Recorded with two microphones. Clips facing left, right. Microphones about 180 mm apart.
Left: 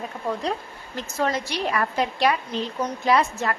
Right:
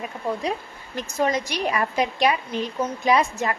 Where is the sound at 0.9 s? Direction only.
15° right (ahead or behind).